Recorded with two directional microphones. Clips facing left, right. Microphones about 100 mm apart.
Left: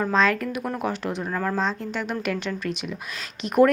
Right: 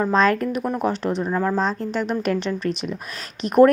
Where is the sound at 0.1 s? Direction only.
40° right (ahead or behind).